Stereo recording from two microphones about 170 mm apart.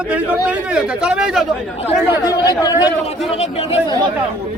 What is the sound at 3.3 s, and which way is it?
Speech, 40° left (ahead or behind).